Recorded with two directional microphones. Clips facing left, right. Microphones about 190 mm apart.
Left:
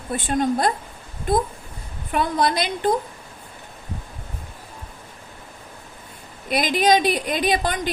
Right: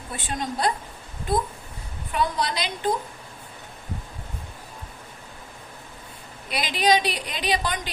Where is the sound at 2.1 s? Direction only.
50° left (ahead or behind).